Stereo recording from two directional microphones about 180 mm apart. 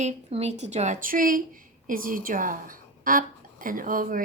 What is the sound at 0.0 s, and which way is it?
A woman's voice, 35° right (ahead or behind).